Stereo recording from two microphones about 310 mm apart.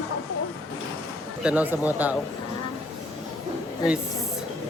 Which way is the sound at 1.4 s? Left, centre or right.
Centre.